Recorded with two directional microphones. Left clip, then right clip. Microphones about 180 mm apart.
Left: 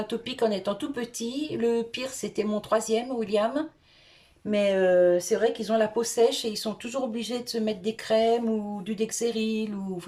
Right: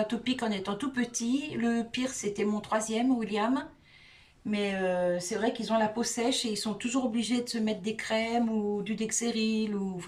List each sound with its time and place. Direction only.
0.1 s speech: 30° left (ahead or behind)